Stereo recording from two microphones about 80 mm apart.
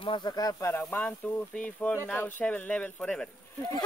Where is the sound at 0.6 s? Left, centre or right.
Left.